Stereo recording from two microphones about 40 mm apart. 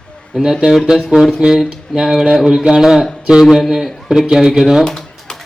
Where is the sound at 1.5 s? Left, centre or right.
Centre.